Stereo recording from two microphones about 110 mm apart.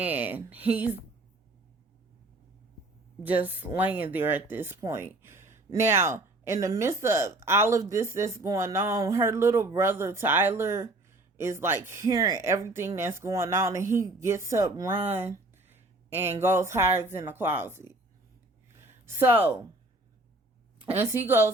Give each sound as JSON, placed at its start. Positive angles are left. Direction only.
{"t": 0.0, "sound": "speech", "side_deg": -15}
{"t": 3.2, "sound": "speech", "side_deg": -15}
{"t": 12.4, "sound": "speech", "side_deg": -25}
{"t": 16.4, "sound": "speech", "side_deg": -20}
{"t": 18.7, "sound": "a sound", "side_deg": -25}
{"t": 20.9, "sound": "speech", "side_deg": -20}